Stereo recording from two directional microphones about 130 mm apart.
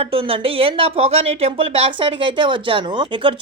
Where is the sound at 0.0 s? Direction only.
45° right (ahead or behind).